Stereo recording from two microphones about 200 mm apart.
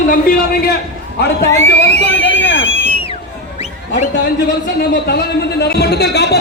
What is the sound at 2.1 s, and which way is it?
Speech, 65° left (ahead or behind).